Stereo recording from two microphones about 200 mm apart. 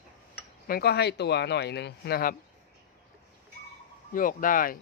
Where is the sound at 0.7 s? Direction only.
50° left (ahead or behind).